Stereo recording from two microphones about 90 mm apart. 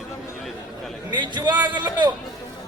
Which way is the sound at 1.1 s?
55° right (ahead or behind).